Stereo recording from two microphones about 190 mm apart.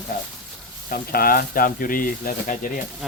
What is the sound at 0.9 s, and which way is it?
Speech, 50° left (ahead or behind).